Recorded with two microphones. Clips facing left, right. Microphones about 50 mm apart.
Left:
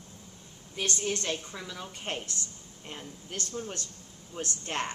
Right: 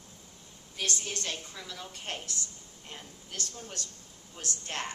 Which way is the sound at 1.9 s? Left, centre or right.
Left.